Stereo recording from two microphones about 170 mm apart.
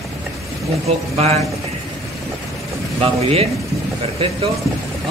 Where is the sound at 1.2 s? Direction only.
40° right (ahead or behind).